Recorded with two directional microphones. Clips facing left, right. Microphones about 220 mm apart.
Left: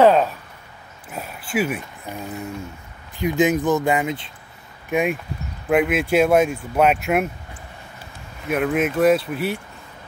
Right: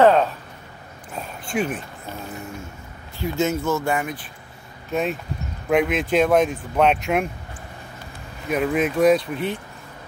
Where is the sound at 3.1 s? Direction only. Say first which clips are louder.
Left 4 dB; 15° left (ahead or behind).